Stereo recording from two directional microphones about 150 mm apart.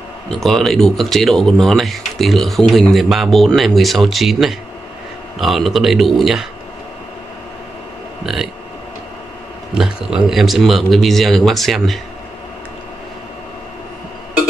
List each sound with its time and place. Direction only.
0.3 s speech: centre (ahead or behind)
9.8 s speech: 5° right (ahead or behind)